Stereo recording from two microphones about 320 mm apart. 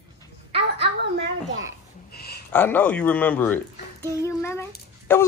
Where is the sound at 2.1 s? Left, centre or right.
Left.